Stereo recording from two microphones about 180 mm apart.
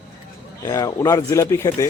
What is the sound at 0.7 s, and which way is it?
Speech, 20° left (ahead or behind).